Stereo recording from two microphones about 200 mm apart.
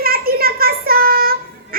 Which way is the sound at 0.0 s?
50° right (ahead or behind).